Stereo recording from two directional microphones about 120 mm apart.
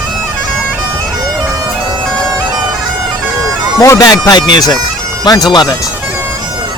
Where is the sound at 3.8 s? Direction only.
30° left (ahead or behind).